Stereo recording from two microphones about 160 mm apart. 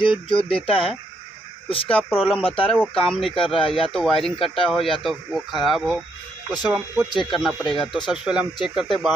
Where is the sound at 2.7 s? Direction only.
5° left (ahead or behind).